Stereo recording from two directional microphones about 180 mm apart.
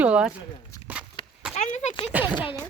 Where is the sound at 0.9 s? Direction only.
10° right (ahead or behind).